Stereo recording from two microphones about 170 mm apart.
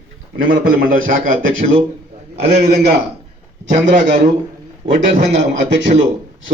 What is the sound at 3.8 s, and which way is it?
Speech, 90° right.